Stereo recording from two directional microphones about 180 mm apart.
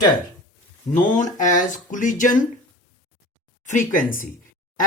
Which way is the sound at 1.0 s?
45° left (ahead or behind).